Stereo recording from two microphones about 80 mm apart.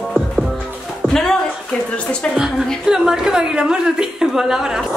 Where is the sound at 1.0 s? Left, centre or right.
Centre.